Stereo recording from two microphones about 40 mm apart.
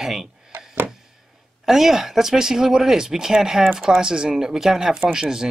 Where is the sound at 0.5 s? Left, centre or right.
Right.